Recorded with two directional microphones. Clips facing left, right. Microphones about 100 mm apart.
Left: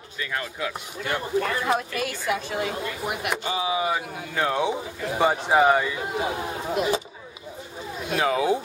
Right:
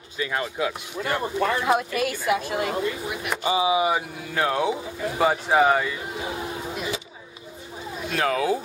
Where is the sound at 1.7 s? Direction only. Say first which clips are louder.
Right 3 dB; 5° right (ahead or behind).